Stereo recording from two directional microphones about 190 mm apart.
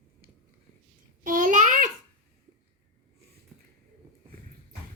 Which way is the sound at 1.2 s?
45° right (ahead or behind).